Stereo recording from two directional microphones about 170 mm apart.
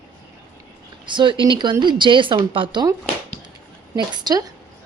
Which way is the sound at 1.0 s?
30° right (ahead or behind).